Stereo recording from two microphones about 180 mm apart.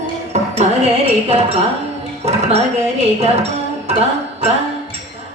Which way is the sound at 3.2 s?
35° right (ahead or behind).